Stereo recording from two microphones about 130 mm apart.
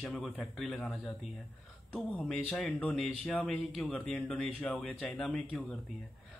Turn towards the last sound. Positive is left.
turn(degrees=10)  # may be behind; listen again after turning